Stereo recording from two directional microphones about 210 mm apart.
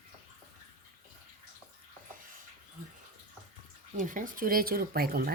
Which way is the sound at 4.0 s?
40° right (ahead or behind).